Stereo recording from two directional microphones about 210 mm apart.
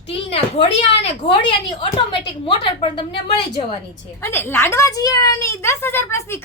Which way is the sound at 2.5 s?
20° left (ahead or behind).